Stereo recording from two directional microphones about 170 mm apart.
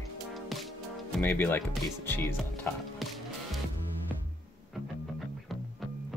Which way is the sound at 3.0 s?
Centre (ahead or behind).